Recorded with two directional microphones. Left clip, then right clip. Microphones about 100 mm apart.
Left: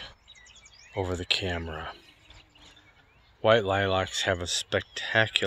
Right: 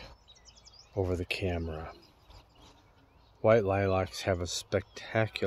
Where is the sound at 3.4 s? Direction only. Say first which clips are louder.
Left 3 dB; 15° right (ahead or behind).